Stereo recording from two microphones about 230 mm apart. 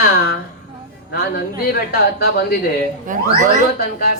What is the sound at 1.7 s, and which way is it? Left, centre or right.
Speech, left.